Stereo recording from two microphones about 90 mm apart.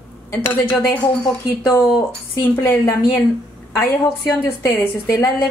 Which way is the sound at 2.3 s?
30° left (ahead or behind).